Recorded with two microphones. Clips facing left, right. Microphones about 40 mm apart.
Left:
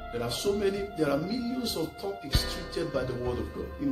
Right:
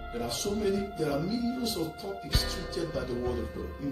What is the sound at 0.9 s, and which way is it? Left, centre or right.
Speech, centre.